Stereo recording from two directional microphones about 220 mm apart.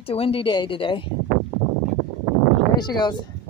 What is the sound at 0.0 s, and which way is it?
A woman's voice, 25° left (ahead or behind).